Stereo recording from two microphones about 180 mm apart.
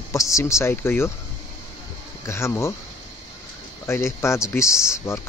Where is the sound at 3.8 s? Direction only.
15° left (ahead or behind).